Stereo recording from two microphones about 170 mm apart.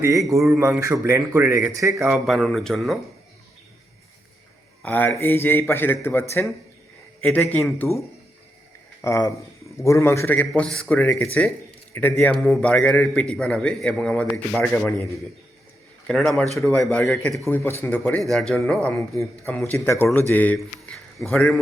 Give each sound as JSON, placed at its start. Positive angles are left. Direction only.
{"t": 0.0, "sound": "a man's voice", "side_deg": -20}
{"t": 0.5, "sound": "speech", "side_deg": -5}
{"t": 0.8, "sound": "speech", "side_deg": -20}
{"t": 2.2, "sound": "a man's voice", "side_deg": 0}
{"t": 4.8, "sound": "a man's voice", "side_deg": 10}
{"t": 9.0, "sound": "a man's voice", "side_deg": 15}
{"t": 17.5, "sound": "a man's voice", "side_deg": 10}